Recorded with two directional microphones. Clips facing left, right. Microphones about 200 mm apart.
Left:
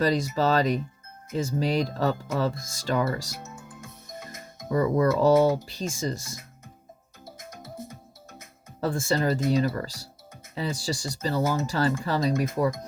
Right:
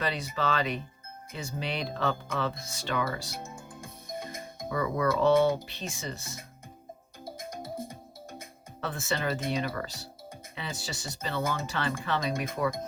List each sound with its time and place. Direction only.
0.0 s speech: 40° left (ahead or behind)
3.4 s music: 30° right (ahead or behind)
4.7 s speech: 40° left (ahead or behind)
7.3 s music: 30° right (ahead or behind)
8.8 s speech: 35° left (ahead or behind)